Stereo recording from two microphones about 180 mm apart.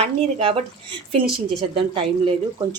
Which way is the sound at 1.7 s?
30° right (ahead or behind).